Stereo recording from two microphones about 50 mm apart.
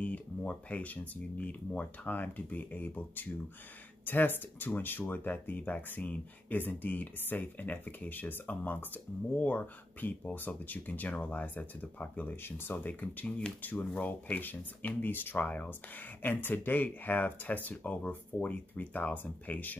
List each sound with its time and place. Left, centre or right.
0.0 s speech: left
12.4 s speech: left
12.8 s speech: left